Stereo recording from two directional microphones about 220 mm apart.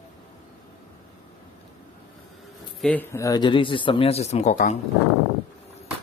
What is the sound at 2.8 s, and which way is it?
Speech, 5° left (ahead or behind).